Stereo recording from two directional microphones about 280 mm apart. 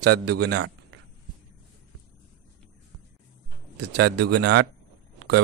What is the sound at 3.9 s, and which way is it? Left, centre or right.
Speech, right.